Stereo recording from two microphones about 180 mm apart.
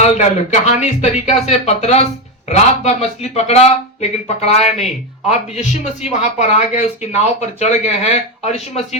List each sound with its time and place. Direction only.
0.0 s speech: 40° left (ahead or behind)